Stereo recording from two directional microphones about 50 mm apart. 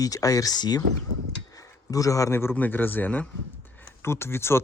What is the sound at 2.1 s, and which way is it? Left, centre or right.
Speech, left.